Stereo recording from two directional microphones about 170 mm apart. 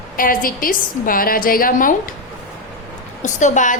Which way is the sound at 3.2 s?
45° left (ahead or behind).